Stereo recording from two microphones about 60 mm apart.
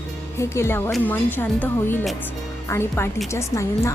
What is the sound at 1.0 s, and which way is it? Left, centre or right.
Speech, left.